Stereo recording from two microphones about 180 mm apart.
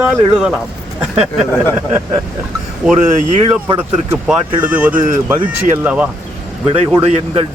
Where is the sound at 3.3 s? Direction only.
35° right (ahead or behind).